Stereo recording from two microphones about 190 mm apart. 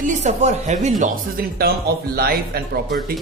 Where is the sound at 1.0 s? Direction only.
55° right (ahead or behind).